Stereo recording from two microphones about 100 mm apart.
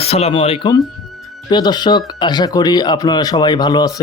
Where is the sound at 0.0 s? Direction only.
85° left; by 0.7 s 70° left (ahead or behind).